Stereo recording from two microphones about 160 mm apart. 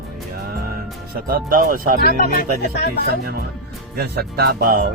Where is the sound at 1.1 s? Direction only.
65° right (ahead or behind).